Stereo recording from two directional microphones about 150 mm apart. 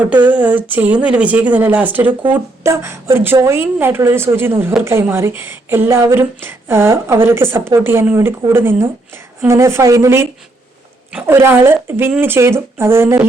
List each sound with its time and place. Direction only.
0.4 s speech: 10° right (ahead or behind)